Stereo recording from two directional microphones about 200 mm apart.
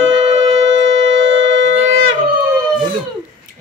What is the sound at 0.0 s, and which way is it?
Shofar, 70° right (ahead or behind).